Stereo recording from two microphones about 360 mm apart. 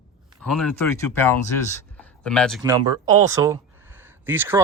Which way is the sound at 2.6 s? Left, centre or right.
Centre.